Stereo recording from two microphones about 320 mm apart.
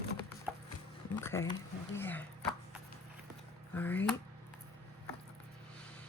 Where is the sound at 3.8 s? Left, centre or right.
Centre.